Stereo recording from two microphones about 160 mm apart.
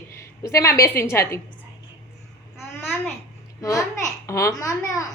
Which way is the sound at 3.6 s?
20° left (ahead or behind).